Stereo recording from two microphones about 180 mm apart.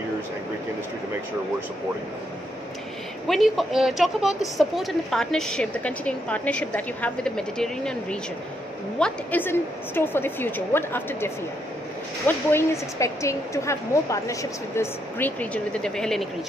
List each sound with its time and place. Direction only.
3.3 s a woman's voice: centre (ahead or behind)